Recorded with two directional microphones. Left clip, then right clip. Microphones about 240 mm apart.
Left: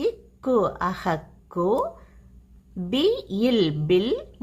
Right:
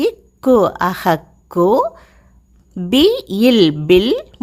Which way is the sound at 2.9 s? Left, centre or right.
Right.